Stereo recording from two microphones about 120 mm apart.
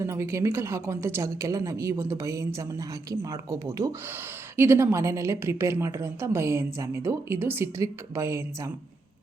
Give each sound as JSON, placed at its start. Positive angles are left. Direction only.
{"t": 0.0, "sound": "a woman's voice", "side_deg": -20}